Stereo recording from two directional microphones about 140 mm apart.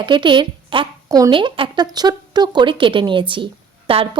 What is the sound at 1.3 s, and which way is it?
A woman's voice, 35° right (ahead or behind).